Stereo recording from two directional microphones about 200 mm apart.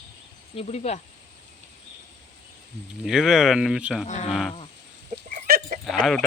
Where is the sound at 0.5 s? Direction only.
30° left (ahead or behind).